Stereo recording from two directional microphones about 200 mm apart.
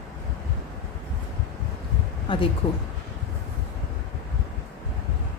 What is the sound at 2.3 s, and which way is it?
Speech, 25° left (ahead or behind).